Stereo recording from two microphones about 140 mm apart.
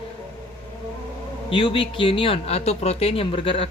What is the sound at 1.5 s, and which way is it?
Speech, 40° left (ahead or behind).